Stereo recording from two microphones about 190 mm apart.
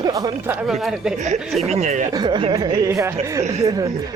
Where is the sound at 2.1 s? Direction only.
25° right (ahead or behind).